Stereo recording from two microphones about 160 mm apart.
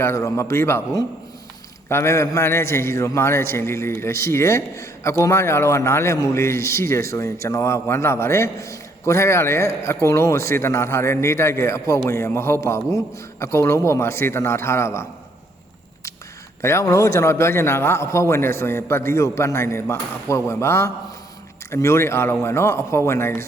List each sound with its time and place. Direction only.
0.0 s a man's voice: 20° left (ahead or behind)
16.6 s a man's voice: 15° left (ahead or behind)